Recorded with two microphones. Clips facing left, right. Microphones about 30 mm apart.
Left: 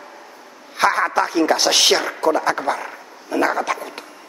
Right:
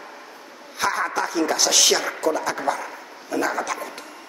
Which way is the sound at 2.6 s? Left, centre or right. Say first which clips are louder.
Left 2 dB; centre.